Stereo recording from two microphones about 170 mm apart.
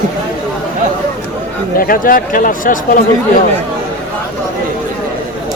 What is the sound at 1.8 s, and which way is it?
Speech, 55° left (ahead or behind).